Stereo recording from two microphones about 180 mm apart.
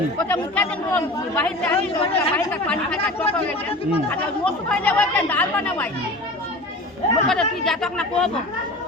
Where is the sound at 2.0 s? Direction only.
30° left (ahead or behind).